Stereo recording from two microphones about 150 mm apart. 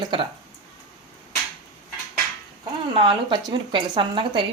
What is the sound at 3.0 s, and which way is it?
A woman's voice, 35° right (ahead or behind).